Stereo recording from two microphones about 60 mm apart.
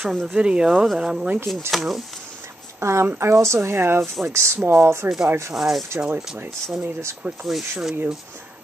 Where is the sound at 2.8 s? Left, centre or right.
Right.